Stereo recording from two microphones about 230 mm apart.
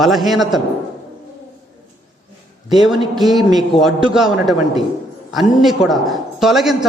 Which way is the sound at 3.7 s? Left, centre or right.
Left.